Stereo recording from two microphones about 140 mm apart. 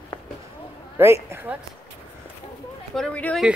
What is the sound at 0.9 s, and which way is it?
Speech, 20° right (ahead or behind).